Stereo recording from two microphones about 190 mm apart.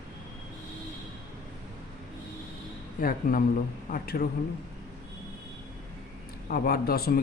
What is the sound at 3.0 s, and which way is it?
A man's voice, 50° left (ahead or behind).